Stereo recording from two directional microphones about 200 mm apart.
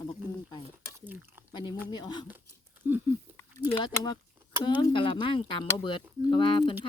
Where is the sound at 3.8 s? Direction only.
25° left (ahead or behind).